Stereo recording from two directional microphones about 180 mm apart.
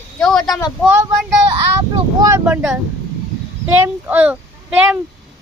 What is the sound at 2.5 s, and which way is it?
A child's voice, 5° right (ahead or behind).